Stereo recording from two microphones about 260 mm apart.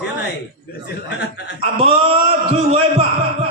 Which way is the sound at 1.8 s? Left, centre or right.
Right.